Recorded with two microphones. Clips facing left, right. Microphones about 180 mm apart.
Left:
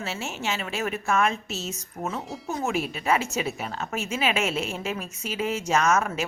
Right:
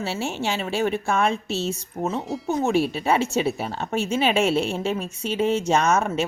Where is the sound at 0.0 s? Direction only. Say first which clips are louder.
Right 5 dB; 30° right (ahead or behind).